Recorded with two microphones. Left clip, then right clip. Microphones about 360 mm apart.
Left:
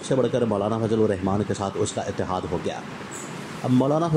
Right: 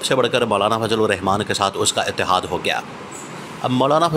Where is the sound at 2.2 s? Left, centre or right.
Right.